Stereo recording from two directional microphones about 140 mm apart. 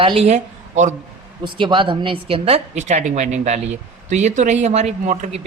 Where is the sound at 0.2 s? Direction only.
55° right (ahead or behind).